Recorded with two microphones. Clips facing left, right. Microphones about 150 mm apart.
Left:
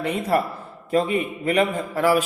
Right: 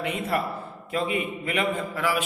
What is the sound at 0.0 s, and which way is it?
A man's voice, 35° left (ahead or behind).